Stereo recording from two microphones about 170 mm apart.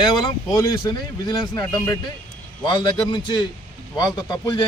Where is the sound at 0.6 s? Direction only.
20° left (ahead or behind).